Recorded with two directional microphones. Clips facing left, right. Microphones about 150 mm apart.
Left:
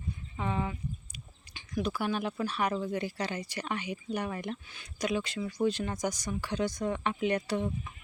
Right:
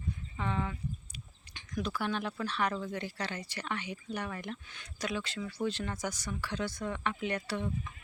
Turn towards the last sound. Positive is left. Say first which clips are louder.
# left 5 dB
turn(degrees=15)  # may be behind; listen again after turning